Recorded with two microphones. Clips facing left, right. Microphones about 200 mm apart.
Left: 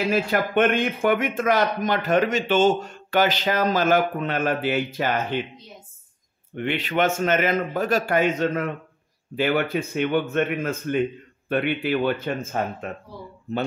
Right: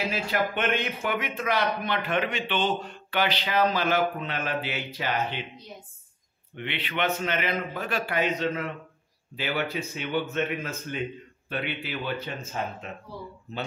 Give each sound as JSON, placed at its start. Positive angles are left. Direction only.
{"t": 0.1, "sound": "a man's voice", "side_deg": 50}
{"t": 6.5, "sound": "a man's voice", "side_deg": 45}